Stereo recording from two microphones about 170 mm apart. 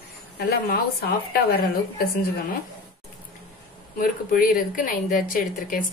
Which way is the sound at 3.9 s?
55° left (ahead or behind).